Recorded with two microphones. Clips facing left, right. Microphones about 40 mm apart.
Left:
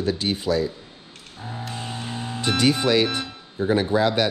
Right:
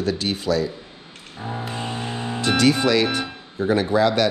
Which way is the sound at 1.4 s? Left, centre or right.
Right.